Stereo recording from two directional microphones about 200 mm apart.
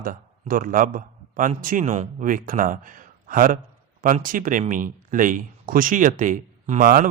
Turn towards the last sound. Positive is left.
turn(degrees=-45)  # may be behind; listen again after turning